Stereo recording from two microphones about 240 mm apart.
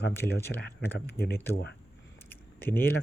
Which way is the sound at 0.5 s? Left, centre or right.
Left.